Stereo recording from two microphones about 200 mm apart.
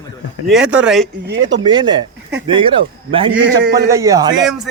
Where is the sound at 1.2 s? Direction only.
65° right (ahead or behind).